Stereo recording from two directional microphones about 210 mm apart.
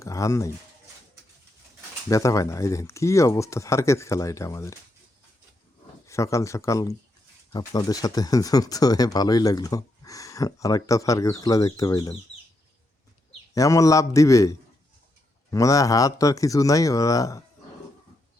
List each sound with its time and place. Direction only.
0.0 s speech: 15° left (ahead or behind)
2.0 s speech: 15° left (ahead or behind)
6.1 s speech: 15° left (ahead or behind)
13.5 s speech: 15° left (ahead or behind)